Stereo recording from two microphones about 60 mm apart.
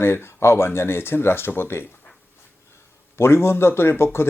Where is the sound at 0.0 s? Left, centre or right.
Left.